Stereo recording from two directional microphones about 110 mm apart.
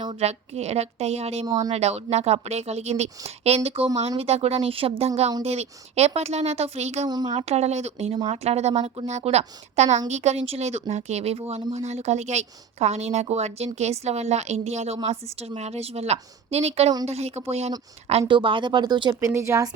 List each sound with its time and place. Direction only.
0.1 s speech: 75° right (ahead or behind)
7.1 s a woman's voice: 40° right (ahead or behind)
7.3 s a woman's voice: 70° right (ahead or behind)
15.0 s speech: 70° right (ahead or behind)
18.3 s speech: 45° right (ahead or behind)
19.2 s speech: 25° right (ahead or behind)